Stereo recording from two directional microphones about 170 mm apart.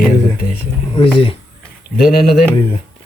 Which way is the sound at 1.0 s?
30° left (ahead or behind).